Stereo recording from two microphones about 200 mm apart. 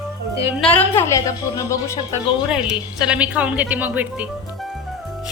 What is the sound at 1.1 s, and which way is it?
Speech, 15° left (ahead or behind).